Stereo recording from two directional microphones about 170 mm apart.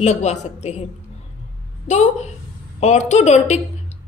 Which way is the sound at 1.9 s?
40° left (ahead or behind).